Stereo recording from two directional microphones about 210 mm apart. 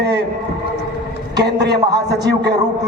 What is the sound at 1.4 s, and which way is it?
A man's voice, 55° right (ahead or behind).